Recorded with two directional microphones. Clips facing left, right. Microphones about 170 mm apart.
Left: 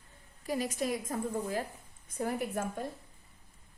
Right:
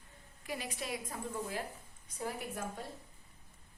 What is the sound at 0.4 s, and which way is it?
A woman's voice, 40° left (ahead or behind).